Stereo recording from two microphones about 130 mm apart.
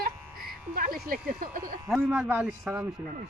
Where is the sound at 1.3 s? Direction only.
90° right.